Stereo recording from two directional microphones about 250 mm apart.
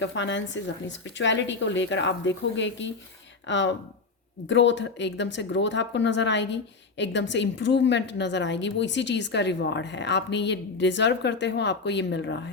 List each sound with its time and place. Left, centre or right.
0.0 s a woman's voice: left